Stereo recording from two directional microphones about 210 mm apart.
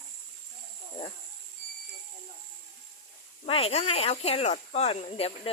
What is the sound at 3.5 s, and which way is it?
Speech, 30° left (ahead or behind).